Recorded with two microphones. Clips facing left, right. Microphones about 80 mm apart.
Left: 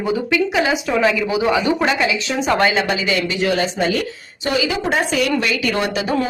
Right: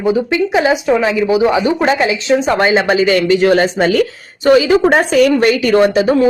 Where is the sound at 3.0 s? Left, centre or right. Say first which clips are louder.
Right 9 dB; right.